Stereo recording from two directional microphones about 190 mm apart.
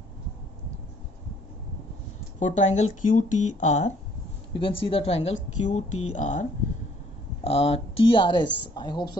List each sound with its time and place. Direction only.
2.4 s speech: 40° left (ahead or behind)
4.6 s a woman's voice: 25° left (ahead or behind)
7.4 s a woman's voice: 30° left (ahead or behind)